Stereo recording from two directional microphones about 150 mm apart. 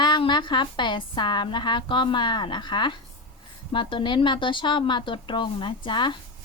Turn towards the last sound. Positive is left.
turn(degrees=30)  # may be behind; listen again after turning